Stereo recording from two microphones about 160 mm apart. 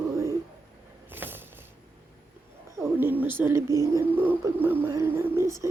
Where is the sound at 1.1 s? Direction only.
10° right (ahead or behind).